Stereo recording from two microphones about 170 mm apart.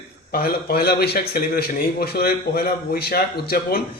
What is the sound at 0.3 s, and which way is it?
A man's voice, 60° left (ahead or behind).